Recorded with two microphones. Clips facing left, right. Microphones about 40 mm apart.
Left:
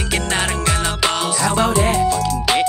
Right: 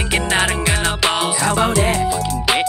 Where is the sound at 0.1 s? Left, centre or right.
Centre.